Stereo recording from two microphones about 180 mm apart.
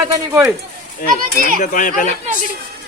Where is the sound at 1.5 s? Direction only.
50° left (ahead or behind).